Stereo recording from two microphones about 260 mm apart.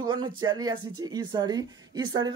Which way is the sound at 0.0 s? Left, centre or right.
Centre.